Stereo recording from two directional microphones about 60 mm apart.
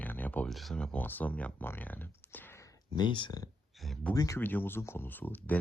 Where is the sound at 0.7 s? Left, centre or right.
Centre.